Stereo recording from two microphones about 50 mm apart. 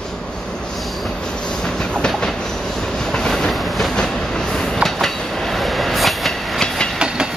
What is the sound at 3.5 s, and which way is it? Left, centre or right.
Train, centre.